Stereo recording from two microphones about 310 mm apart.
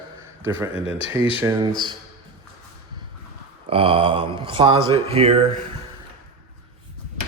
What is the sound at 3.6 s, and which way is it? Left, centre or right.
Speech, centre.